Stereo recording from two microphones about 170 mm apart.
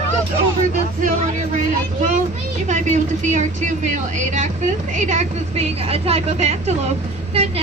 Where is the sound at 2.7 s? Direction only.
45° right (ahead or behind).